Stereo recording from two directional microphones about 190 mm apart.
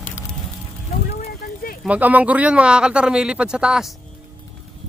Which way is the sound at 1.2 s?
55° left (ahead or behind).